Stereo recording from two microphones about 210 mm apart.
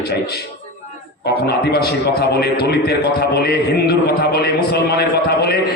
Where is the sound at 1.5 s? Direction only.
50° left (ahead or behind).